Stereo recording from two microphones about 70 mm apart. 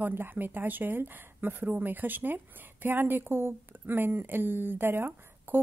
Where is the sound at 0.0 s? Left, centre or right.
Right.